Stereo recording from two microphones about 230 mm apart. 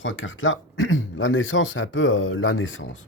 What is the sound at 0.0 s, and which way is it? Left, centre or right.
Speech, left.